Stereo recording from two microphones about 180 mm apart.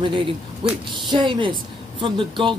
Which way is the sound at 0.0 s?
25° right (ahead or behind).